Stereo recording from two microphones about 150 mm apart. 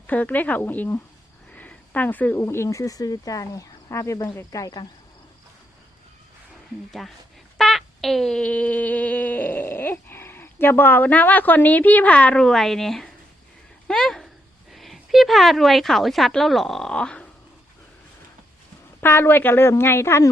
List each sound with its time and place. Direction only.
0.1 s speech: 10° left (ahead or behind); by 4.9 s 25° left (ahead or behind)
7.0 s speech: centre (ahead or behind)
7.6 s a sound: centre (ahead or behind)
13.8 s a woman's voice: 5° left (ahead or behind)
18.9 s speech: 15° left (ahead or behind)